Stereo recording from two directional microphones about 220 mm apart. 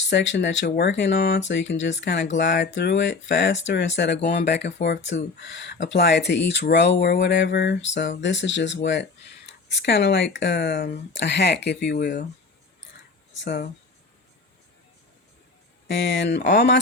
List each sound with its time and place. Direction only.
0.1 s speech: 55° left (ahead or behind)
13.4 s speech: 50° left (ahead or behind)
15.9 s speech: 55° left (ahead or behind)